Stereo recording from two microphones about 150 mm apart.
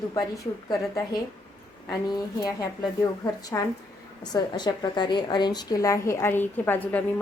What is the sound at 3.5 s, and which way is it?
A woman's voice, 15° left (ahead or behind).